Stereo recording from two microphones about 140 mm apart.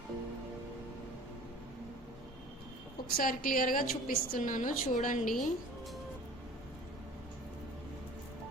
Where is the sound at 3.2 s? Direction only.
90° left; by 5.3 s 65° left (ahead or behind).